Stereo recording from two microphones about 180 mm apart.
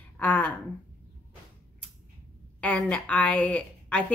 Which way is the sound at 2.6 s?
10° left (ahead or behind).